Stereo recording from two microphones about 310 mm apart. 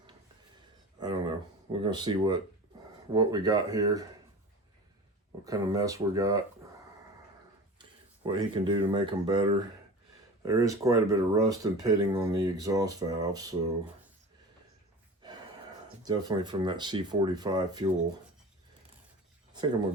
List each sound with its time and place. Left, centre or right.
0.9 s a sound: centre
1.8 s speech: centre
5.5 s speech: centre
7.8 s speech: centre
16.0 s speech: centre